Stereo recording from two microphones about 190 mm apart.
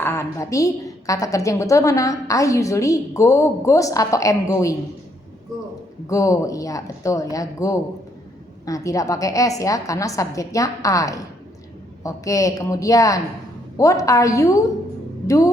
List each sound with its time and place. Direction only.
0.0 s a woman's voice: 15° left (ahead or behind)
6.1 s a woman's voice: 15° left (ahead or behind)